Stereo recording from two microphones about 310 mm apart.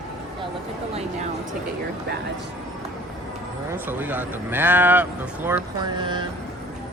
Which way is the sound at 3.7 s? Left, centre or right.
Centre.